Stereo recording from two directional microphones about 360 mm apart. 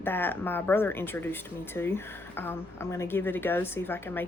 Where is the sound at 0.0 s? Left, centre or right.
Centre.